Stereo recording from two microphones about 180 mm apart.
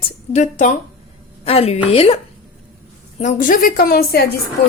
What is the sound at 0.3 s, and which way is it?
A woman's voice, 40° left (ahead or behind).